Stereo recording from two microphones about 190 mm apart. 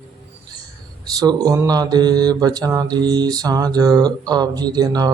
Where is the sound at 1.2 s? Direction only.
20° right (ahead or behind).